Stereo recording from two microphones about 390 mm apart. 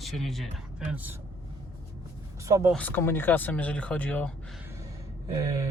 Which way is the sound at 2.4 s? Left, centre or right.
Centre.